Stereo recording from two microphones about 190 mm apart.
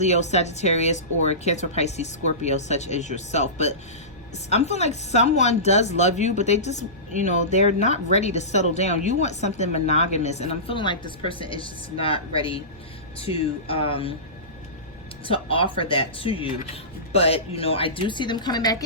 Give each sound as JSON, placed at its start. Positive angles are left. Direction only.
{"t": 0.0, "sound": "speech", "side_deg": 35}
{"t": 15.2, "sound": "speech", "side_deg": 30}